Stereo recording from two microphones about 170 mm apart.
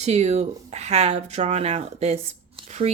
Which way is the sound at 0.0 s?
40° right (ahead or behind).